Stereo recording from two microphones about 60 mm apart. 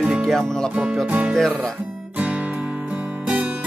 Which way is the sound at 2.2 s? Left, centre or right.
Right.